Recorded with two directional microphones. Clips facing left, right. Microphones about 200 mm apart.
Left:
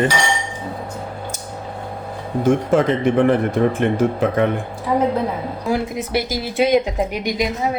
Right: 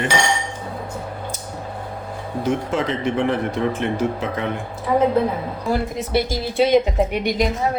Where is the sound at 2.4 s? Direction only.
50° left (ahead or behind).